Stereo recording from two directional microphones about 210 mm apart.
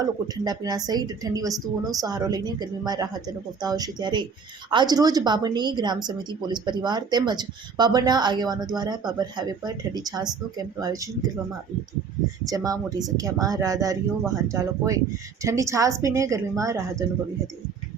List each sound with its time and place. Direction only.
0.0 s a woman's voice: 15° right (ahead or behind)
12.5 s speech: 15° right (ahead or behind)